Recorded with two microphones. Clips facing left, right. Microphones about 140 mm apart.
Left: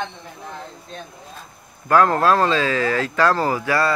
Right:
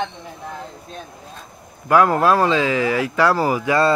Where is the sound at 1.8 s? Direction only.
10° right (ahead or behind).